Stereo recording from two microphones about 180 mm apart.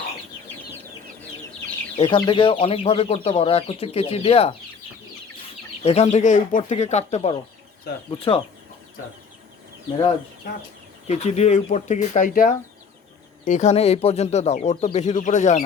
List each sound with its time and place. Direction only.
2.0 s speech: 25° left (ahead or behind)
5.8 s speech: 35° left (ahead or behind)
11.1 s speech: 40° left (ahead or behind)